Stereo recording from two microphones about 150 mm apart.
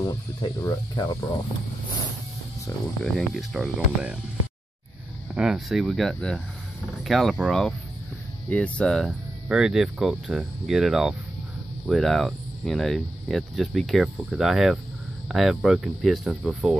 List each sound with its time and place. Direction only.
0.0 s speech: 30° left (ahead or behind)
3.0 s speech: centre (ahead or behind)
5.3 s speech: 5° right (ahead or behind)
9.0 s speech: 5° right (ahead or behind)